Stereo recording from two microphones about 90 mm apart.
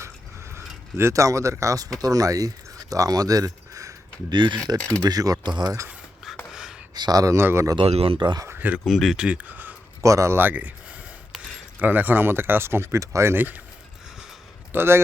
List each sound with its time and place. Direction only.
0.9 s speech: 30° right (ahead or behind)
4.3 s speech: 60° right (ahead or behind)
5.0 s speech: 45° right (ahead or behind)
6.5 s a sound: 5° right (ahead or behind)
6.9 s speech: 50° right (ahead or behind); by 7.8 s 30° right (ahead or behind)
7.8 s speech: 90° right
8.4 s speech: 20° right (ahead or behind)
8.9 s speech: centre (ahead or behind)
9.1 s speech: 15° right (ahead or behind)
10.0 s speech: 35° right (ahead or behind)
11.8 s speech: 20° right (ahead or behind)
14.7 s a man's voice: 25° right (ahead or behind)